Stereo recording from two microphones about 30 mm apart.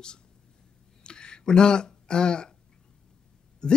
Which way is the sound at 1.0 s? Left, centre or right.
Left.